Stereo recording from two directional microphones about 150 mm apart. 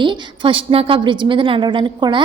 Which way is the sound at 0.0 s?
35° right (ahead or behind).